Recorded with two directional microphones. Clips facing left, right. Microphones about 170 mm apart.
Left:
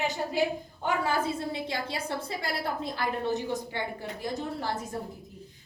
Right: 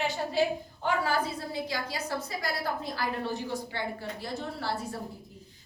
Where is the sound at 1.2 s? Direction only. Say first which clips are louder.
Left 2 dB; 25° left (ahead or behind).